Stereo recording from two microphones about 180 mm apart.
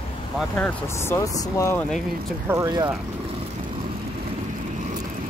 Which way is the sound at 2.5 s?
20° right (ahead or behind).